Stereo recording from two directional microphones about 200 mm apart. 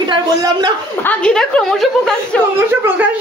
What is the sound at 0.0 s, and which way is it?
Speech, 20° right (ahead or behind).